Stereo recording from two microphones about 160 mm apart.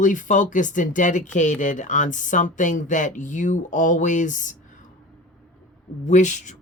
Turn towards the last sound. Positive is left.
turn(degrees=50)  # may be behind; listen again after turning